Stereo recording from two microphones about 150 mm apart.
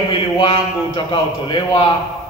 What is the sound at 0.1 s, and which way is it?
A man's voice, 35° left (ahead or behind).